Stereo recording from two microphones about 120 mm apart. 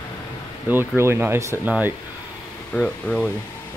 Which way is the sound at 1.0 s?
20° right (ahead or behind).